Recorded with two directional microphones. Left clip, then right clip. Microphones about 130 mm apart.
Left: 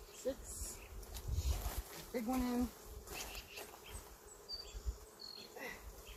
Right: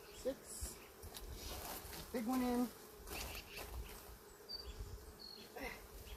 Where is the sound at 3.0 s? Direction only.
30° right (ahead or behind).